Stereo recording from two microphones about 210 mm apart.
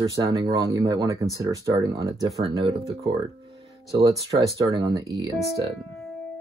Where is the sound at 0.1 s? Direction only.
15° right (ahead or behind).